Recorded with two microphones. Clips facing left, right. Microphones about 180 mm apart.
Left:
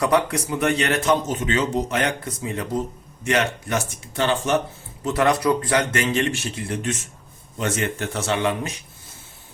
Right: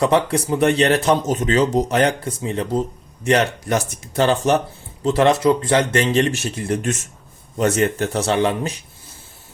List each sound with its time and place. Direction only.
0.0 s speech: 30° right (ahead or behind)